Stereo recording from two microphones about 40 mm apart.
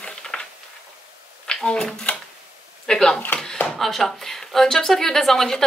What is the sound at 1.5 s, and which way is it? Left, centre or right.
A woman's voice, centre.